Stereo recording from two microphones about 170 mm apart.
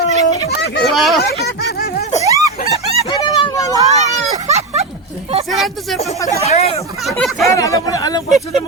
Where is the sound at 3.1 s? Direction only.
25° left (ahead or behind).